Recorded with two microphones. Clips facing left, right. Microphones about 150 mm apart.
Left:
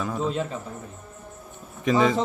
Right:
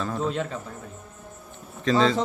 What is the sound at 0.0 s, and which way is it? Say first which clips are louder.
Speech: even; 5° left (ahead or behind).